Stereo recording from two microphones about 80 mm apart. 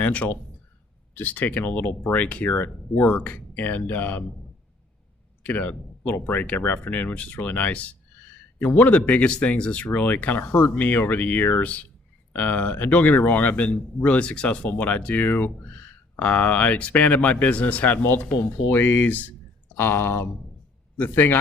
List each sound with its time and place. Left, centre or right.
0.0 s a man's voice: centre
5.4 s a man's voice: centre